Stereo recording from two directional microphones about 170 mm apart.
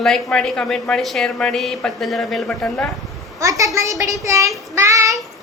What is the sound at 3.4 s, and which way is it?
A child's voice, 20° right (ahead or behind).